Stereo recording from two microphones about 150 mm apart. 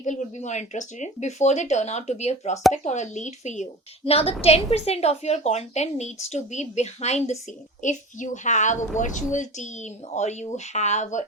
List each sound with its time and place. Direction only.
0.0 s a woman's voice: 55° left (ahead or behind)
4.0 s a woman's voice: 40° left (ahead or behind)